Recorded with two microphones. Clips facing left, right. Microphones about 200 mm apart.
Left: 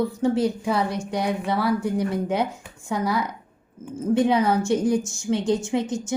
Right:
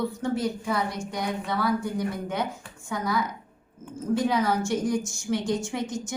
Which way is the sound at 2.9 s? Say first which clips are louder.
Left 4 dB; 30° left (ahead or behind).